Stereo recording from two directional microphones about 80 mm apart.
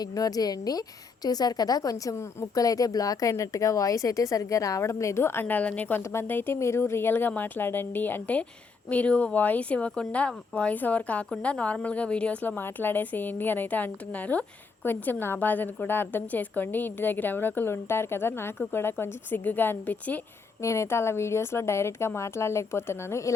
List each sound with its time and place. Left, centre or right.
0.0 s a woman's voice: left; by 6.0 s centre
6.0 s a woman's voice: left
20.6 s speech: left